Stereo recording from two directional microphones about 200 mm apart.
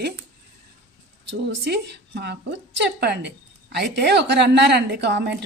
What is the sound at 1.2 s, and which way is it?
A woman's voice, 60° right (ahead or behind).